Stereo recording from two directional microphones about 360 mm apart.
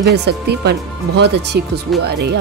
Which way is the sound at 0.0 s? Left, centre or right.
Right.